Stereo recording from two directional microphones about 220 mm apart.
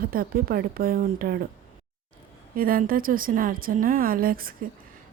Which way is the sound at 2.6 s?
40° right (ahead or behind).